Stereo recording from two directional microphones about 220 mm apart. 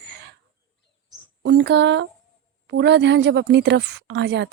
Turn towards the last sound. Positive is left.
turn(degrees=-50)  # may be behind; listen again after turning